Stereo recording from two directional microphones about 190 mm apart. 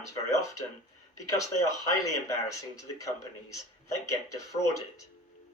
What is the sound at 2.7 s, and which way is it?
Speech, 15° left (ahead or behind).